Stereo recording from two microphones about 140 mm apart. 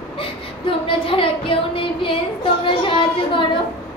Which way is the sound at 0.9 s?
40° left (ahead or behind).